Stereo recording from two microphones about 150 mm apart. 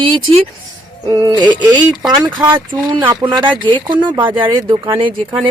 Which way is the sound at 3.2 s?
30° right (ahead or behind).